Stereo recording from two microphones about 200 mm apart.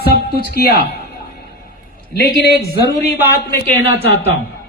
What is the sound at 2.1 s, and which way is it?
Speech, 50° left (ahead or behind).